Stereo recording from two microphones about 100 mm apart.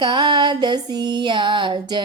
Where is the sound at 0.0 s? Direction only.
55° right (ahead or behind).